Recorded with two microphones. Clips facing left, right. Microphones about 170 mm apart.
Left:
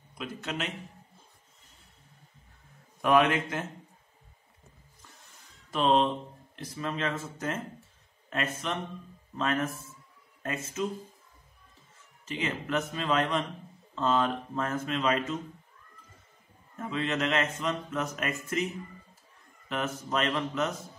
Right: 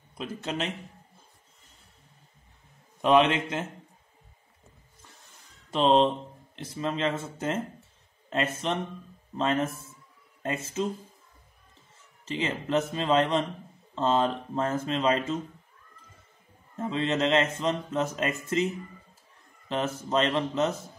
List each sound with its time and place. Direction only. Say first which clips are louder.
0.2 s speech: right 3 dB; 30° right (ahead or behind)
3.0 s speech: right 2 dB; 25° right (ahead or behind)
5.7 s speech: right 3 dB; 30° right (ahead or behind)
12.3 s speech: right 3 dB; 30° right (ahead or behind)
16.7 s speech: right 3 dB; 25° right (ahead or behind)
19.7 s speech: right 4 dB; 30° right (ahead or behind)